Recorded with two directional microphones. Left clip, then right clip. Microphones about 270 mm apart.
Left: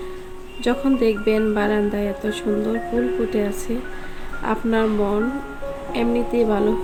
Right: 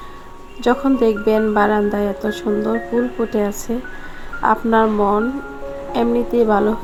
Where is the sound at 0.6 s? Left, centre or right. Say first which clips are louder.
Right 4 dB; centre.